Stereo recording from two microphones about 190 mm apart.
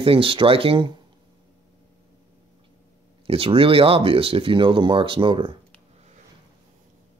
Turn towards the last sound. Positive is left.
turn(degrees=-25)  # may be behind; listen again after turning